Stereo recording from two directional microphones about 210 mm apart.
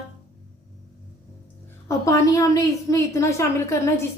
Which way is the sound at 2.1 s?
15° left (ahead or behind).